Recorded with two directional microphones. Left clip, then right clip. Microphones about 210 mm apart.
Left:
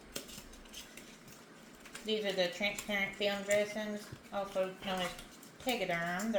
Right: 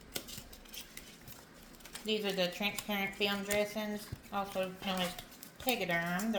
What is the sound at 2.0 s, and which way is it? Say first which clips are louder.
Speech: even; 35° right (ahead or behind).